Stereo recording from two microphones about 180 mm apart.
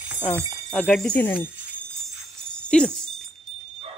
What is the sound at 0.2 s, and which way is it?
Speech, 15° left (ahead or behind).